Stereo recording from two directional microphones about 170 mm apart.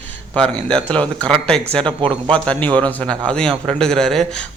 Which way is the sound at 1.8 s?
30° right (ahead or behind).